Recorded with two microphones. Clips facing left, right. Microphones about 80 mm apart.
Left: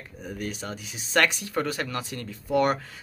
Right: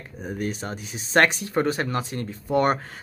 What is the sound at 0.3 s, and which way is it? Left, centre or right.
Speech, right.